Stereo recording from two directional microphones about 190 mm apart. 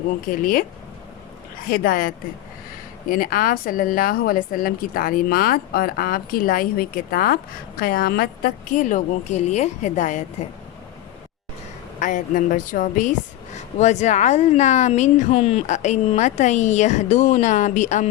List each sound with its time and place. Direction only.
0.3 s a woman's voice: 45° left (ahead or behind)
1.7 s a woman's voice: 50° left (ahead or behind)
11.9 s a woman's voice: 40° left (ahead or behind)